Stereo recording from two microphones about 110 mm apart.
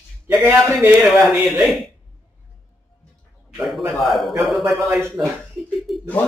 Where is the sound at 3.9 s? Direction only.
Centre (ahead or behind).